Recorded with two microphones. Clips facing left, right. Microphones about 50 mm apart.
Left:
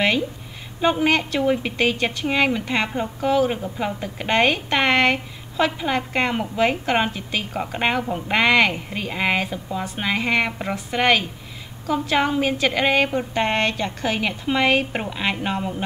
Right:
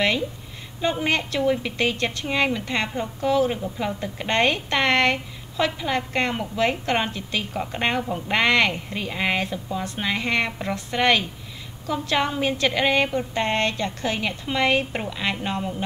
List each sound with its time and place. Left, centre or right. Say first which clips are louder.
0.7 s a woman's voice: left 4 dB; centre
1.4 s a woman's voice: left 1 dB; left
1.8 s a woman's voice: left 3 dB; centre
13.1 s a woman's voice: left 2 dB; centre